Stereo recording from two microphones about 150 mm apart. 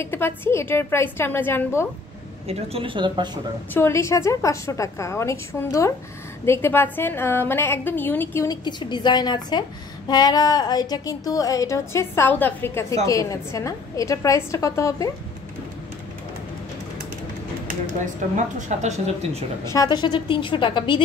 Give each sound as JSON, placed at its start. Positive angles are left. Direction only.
{"t": 0.0, "sound": "a woman's voice", "side_deg": 15}
{"t": 2.4, "sound": "a woman's voice", "side_deg": -40}
{"t": 3.7, "sound": "a woman's voice", "side_deg": 20}
{"t": 8.5, "sound": "a woman's voice", "side_deg": 30}
{"t": 17.6, "sound": "speech", "side_deg": -55}
{"t": 19.6, "sound": "a woman's voice", "side_deg": 20}